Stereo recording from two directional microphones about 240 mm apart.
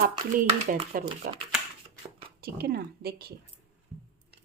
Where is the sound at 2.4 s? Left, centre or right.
Right.